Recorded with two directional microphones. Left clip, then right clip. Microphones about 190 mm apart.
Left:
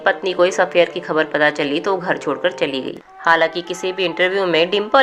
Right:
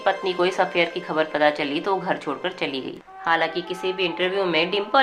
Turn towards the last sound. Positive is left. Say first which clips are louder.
# left 6 dB
turn(degrees=35)  # may be behind; listen again after turning